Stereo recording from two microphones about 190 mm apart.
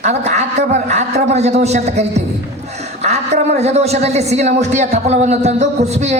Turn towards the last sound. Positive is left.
turn(degrees=-35)  # may be behind; listen again after turning